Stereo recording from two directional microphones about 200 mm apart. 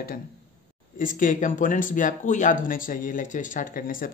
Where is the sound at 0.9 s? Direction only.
45° left (ahead or behind).